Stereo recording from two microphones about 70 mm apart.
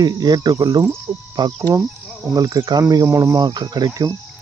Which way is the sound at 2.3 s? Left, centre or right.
Right.